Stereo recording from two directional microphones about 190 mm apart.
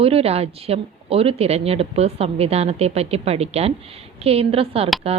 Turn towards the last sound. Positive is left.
turn(degrees=-30)  # may be behind; listen again after turning